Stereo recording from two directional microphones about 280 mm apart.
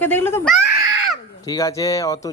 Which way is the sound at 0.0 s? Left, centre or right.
Centre.